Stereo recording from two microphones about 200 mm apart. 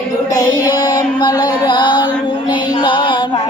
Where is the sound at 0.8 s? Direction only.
20° left (ahead or behind).